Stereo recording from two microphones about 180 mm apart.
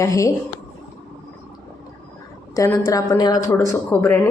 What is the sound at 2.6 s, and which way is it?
A woman's voice, 15° left (ahead or behind).